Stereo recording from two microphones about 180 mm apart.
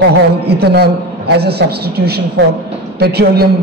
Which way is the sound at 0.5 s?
65° right (ahead or behind).